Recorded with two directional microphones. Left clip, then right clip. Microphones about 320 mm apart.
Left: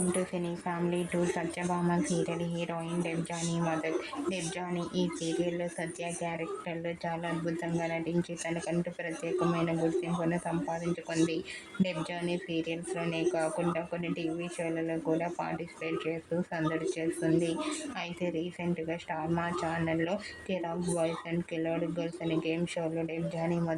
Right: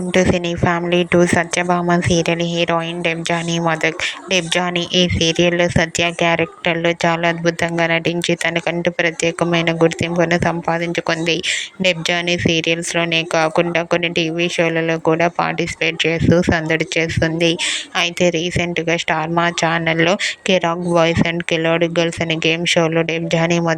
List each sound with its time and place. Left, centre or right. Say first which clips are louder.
0.1 s speech: right 17 dB; right
10.2 s speech: right 16 dB; right
11.8 s speech: right 16 dB; right